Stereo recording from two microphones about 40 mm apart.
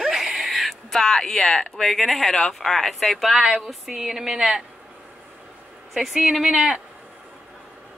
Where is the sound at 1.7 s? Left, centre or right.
Centre.